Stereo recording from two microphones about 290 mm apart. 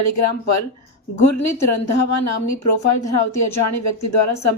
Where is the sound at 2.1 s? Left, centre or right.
Left.